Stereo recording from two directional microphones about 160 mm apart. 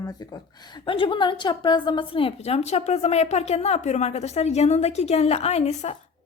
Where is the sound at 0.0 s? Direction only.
25° left (ahead or behind).